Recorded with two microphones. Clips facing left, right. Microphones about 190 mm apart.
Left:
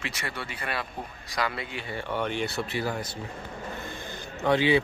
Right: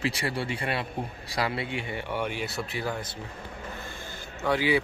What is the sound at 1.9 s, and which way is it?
Speech, 15° right (ahead or behind).